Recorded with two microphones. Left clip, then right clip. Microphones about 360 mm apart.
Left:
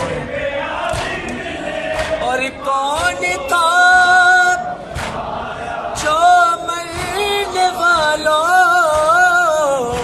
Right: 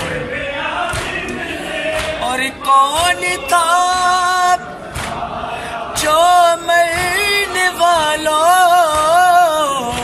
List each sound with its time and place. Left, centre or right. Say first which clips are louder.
2.2 s music: right 1 dB; centre
6.1 s music: right 1 dB; centre